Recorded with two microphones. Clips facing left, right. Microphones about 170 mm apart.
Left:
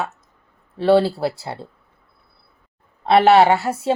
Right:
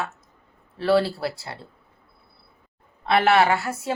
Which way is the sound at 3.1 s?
35° left (ahead or behind).